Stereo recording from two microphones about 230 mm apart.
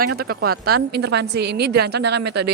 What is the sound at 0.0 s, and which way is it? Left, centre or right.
A woman's voice, right.